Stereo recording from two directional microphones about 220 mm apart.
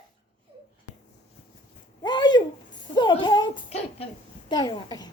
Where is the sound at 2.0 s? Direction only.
20° left (ahead or behind).